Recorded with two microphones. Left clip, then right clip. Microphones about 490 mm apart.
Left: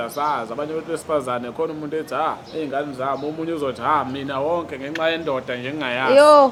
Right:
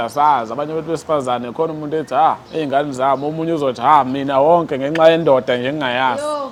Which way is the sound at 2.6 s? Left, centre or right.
Right.